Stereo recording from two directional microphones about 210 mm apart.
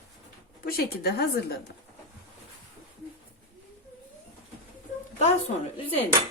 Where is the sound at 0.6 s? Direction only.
45° left (ahead or behind).